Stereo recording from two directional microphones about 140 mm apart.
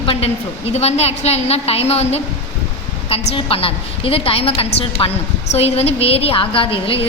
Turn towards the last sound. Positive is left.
turn(degrees=40)  # may be behind; listen again after turning